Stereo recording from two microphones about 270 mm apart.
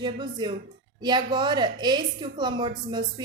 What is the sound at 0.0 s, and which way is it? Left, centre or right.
Speech, centre.